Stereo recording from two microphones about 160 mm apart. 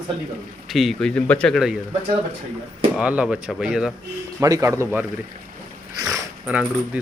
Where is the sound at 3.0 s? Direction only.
5° right (ahead or behind).